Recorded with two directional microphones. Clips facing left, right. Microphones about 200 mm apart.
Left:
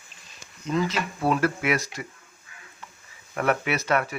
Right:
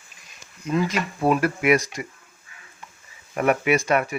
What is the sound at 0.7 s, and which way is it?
Speech, 10° right (ahead or behind).